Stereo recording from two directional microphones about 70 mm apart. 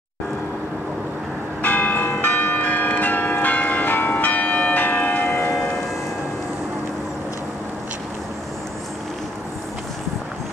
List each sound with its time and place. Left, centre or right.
1.6 s church bell: left